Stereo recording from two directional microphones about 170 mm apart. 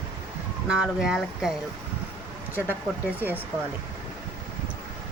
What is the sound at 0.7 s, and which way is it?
Speech, 5° right (ahead or behind).